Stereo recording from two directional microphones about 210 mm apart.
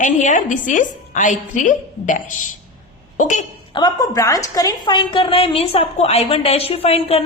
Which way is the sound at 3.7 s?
20° left (ahead or behind).